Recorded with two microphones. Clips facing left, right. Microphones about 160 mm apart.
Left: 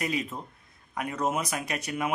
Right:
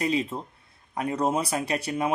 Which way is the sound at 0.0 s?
30° right (ahead or behind).